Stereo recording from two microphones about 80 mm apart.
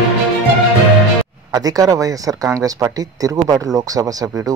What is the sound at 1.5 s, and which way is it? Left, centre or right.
Speech, right.